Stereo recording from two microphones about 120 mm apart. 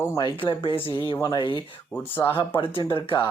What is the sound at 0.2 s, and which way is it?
Speech, 45° left (ahead or behind).